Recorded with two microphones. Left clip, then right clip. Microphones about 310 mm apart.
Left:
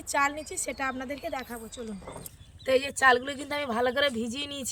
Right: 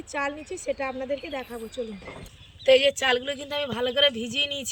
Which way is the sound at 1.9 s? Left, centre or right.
Centre.